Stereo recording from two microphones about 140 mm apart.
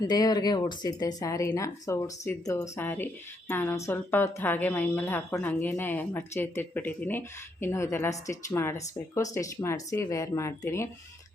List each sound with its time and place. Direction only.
0.1 s a woman's voice: 30° left (ahead or behind)